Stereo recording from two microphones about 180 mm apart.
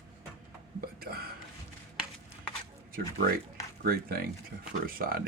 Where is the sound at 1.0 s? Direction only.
60° right (ahead or behind).